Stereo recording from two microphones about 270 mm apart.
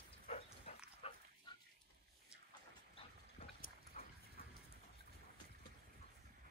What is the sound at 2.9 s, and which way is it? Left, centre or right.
Dog, left.